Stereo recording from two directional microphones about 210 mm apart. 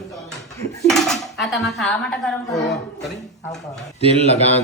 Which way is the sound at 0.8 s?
Centre (ahead or behind).